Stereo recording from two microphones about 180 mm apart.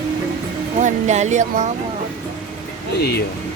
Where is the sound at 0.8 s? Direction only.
40° right (ahead or behind).